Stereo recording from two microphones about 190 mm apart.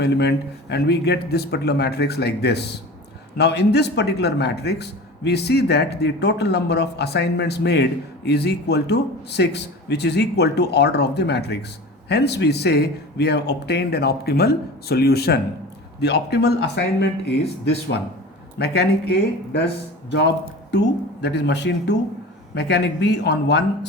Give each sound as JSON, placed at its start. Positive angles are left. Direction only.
{"t": 0.0, "sound": "speech", "side_deg": 60}
{"t": 18.6, "sound": "speech", "side_deg": 60}